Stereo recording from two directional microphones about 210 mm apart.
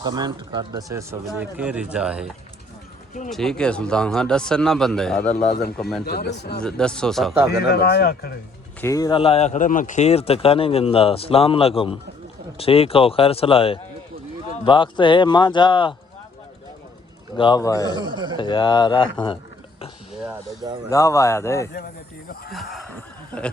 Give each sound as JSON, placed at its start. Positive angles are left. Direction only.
{"t": 0.0, "sound": "speech", "side_deg": -20}
{"t": 1.2, "sound": "speech", "side_deg": -5}
{"t": 6.1, "sound": "speech", "side_deg": 50}
{"t": 6.6, "sound": "speech", "side_deg": 5}
{"t": 7.7, "sound": "speech", "side_deg": 50}
{"t": 8.8, "sound": "speech", "side_deg": 15}
{"t": 17.3, "sound": "speech", "side_deg": 20}
{"t": 18.0, "sound": "speech", "side_deg": -20}
{"t": 18.3, "sound": "speech", "side_deg": 20}
{"t": 20.9, "sound": "speech", "side_deg": 15}